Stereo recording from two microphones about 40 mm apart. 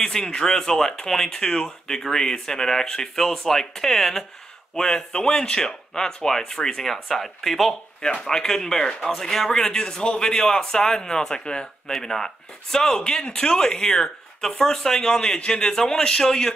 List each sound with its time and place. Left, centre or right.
0.0 s speech: centre
8.3 s speech: centre
11.9 s speech: centre